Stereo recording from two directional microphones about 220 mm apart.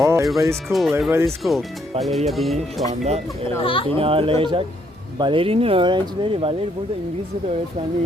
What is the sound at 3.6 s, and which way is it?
Speech, 25° left (ahead or behind).